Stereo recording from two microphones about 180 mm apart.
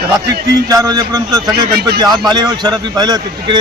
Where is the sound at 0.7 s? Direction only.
20° right (ahead or behind).